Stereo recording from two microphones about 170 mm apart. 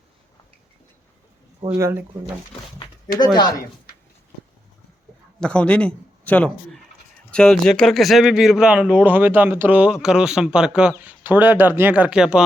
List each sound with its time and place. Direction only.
1.6 s speech: 15° right (ahead or behind)
3.3 s speech: 25° left (ahead or behind)
5.4 s a man's voice: 5° left (ahead or behind)